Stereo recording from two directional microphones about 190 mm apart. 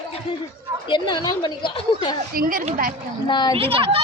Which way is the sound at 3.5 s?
30° right (ahead or behind).